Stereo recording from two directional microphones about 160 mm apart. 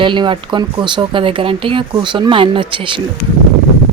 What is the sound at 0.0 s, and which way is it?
Speech, 30° right (ahead or behind).